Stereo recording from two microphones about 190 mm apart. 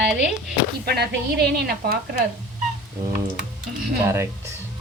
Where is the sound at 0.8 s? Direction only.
60° right (ahead or behind).